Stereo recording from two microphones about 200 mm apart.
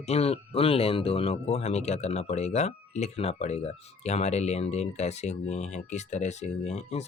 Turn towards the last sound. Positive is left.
turn(degrees=35)  # may be behind; listen again after turning